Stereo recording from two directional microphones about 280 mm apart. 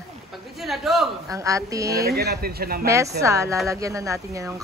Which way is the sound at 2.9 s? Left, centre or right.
Centre.